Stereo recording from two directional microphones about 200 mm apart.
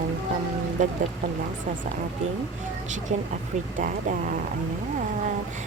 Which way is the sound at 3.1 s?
40° right (ahead or behind).